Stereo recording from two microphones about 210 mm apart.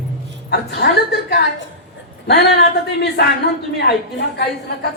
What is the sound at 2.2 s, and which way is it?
Speech, 50° left (ahead or behind).